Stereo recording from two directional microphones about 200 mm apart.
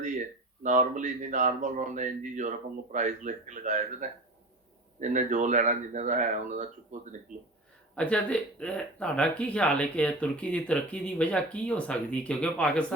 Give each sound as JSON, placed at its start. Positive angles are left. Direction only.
{"t": 0.6, "sound": "speech", "side_deg": -40}
{"t": 4.9, "sound": "speech", "side_deg": -40}
{"t": 7.9, "sound": "speech", "side_deg": 5}